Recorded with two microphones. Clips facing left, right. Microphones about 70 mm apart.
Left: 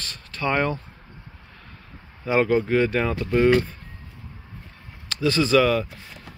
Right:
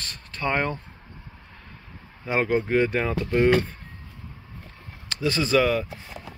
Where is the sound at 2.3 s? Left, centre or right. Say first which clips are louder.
Left 3 dB; right.